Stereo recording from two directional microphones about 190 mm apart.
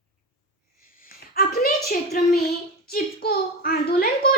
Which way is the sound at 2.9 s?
55° left (ahead or behind).